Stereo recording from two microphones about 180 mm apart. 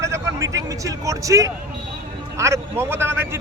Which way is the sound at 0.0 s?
15° right (ahead or behind).